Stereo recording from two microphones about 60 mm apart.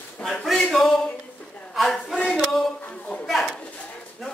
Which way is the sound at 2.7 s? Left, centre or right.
Left.